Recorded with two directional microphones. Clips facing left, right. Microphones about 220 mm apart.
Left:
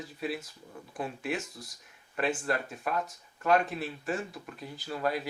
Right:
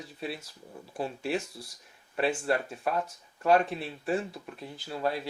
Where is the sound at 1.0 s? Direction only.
30° right (ahead or behind).